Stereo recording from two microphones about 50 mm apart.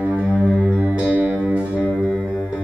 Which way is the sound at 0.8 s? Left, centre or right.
Right.